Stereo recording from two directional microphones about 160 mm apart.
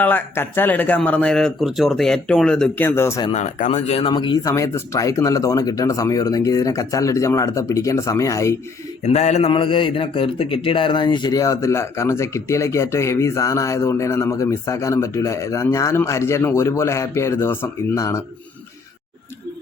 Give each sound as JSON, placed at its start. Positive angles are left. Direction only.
{"t": 0.0, "sound": "speech", "side_deg": 10}
{"t": 3.3, "sound": "speech", "side_deg": 50}
{"t": 9.0, "sound": "mantra", "side_deg": 45}
{"t": 9.5, "sound": "speech", "side_deg": 30}